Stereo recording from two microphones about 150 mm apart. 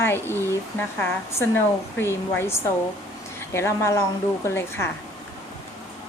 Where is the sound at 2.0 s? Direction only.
15° left (ahead or behind).